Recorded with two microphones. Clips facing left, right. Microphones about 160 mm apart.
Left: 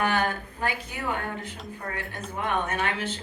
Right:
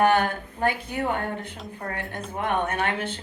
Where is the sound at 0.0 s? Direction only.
55° right (ahead or behind).